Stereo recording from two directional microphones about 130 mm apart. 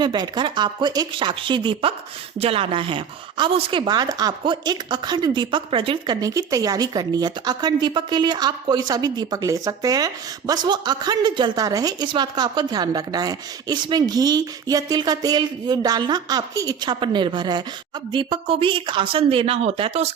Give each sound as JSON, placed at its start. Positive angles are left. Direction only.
{"t": 0.0, "sound": "a woman's voice", "side_deg": -35}
{"t": 6.1, "sound": "a woman's voice", "side_deg": -25}